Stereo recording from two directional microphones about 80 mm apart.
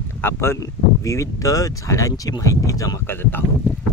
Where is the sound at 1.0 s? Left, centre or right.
Left.